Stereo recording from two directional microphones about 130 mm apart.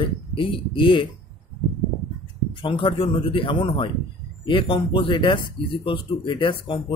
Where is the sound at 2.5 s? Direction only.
40° left (ahead or behind).